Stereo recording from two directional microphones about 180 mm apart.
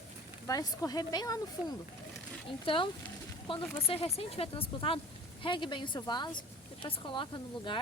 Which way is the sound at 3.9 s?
35° left (ahead or behind).